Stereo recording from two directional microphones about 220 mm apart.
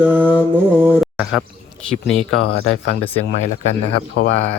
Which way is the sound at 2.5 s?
65° left (ahead or behind).